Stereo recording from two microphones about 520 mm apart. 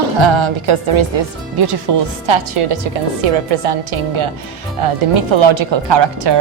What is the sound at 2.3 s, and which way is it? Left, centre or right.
A woman's voice, right.